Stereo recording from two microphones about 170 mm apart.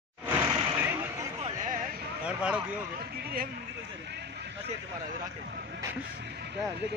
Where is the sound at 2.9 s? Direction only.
65° right (ahead or behind); by 4.7 s 80° right.